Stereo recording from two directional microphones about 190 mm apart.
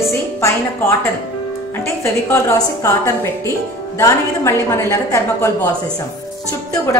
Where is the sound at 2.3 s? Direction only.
15° left (ahead or behind).